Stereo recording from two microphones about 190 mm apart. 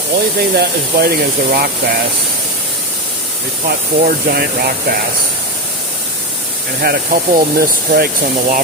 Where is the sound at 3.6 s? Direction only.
50° right (ahead or behind).